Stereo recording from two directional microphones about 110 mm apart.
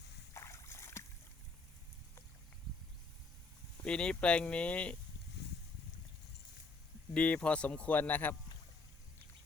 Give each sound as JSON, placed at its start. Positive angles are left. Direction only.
{"t": 0.3, "sound": "a sound", "side_deg": 25}
{"t": 3.8, "sound": "speech", "side_deg": 10}
{"t": 7.1, "sound": "speech", "side_deg": 10}